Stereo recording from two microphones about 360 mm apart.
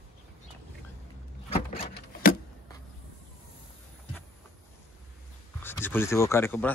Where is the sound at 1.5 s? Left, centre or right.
Centre.